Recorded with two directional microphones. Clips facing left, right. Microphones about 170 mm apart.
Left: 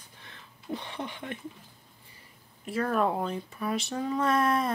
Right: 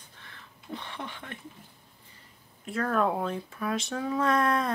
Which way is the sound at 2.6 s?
5° left (ahead or behind).